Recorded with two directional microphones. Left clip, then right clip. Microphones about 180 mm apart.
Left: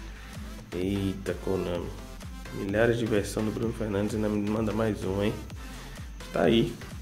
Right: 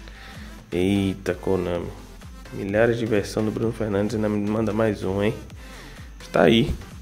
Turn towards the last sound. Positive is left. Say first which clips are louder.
# right 7 dB
turn(degrees=-40)  # may be behind; listen again after turning